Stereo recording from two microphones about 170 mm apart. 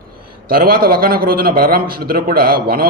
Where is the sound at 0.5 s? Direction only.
60° right (ahead or behind).